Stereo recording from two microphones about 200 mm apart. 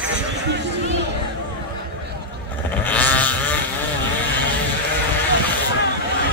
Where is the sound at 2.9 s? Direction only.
10° left (ahead or behind).